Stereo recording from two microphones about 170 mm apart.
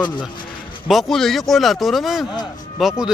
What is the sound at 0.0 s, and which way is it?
Speech, 25° left (ahead or behind).